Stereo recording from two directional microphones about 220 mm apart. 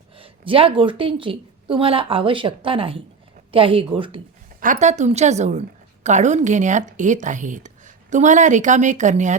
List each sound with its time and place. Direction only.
0.2 s a woman's voice: 25° right (ahead or behind)
4.6 s a woman's voice: 35° right (ahead or behind)